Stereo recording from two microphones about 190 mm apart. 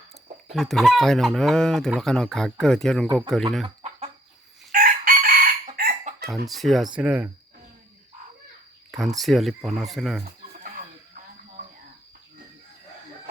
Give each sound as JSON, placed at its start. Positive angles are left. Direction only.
{"t": 0.5, "sound": "chicken", "side_deg": 0}
{"t": 4.7, "sound": "chicken", "side_deg": -50}
{"t": 6.5, "sound": "chicken", "side_deg": 0}
{"t": 9.1, "sound": "chicken", "side_deg": 0}
{"t": 10.6, "sound": "music", "side_deg": -45}